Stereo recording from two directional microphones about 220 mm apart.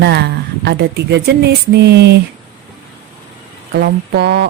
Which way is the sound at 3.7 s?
50° right (ahead or behind).